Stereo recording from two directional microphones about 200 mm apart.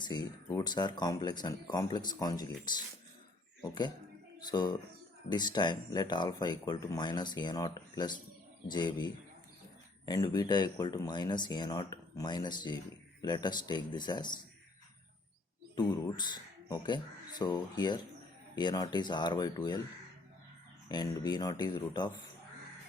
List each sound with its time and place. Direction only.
0.0 s speech: 20° left (ahead or behind)
10.1 s speech: 20° left (ahead or behind)
15.7 s speech: 20° left (ahead or behind)
20.9 s speech: 20° left (ahead or behind)